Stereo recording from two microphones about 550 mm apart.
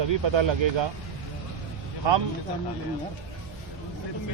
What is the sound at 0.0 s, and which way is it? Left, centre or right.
Speech, right.